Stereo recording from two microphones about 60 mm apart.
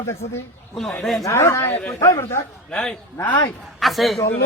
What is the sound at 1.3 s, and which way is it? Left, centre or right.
Speech, left.